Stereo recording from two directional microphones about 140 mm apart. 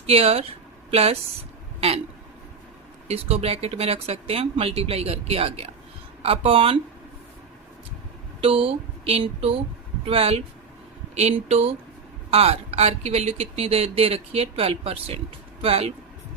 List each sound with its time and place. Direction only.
0.0 s speech: 45° right (ahead or behind)
3.1 s speech: 45° right (ahead or behind)
8.4 s speech: 40° right (ahead or behind)